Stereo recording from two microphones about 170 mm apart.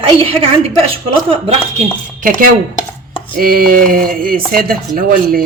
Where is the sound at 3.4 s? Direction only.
60° right (ahead or behind).